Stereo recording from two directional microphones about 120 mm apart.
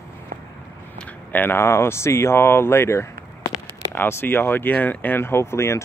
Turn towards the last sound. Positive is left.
turn(degrees=20)  # may be behind; listen again after turning